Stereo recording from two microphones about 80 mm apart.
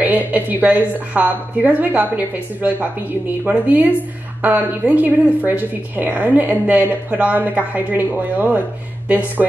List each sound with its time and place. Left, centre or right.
0.0 s a woman's voice: centre
9.4 s speech: centre